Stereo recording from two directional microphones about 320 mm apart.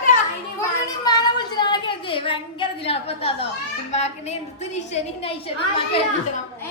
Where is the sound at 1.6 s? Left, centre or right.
Centre.